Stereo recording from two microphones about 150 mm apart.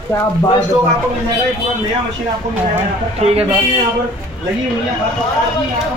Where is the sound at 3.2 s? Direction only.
40° right (ahead or behind).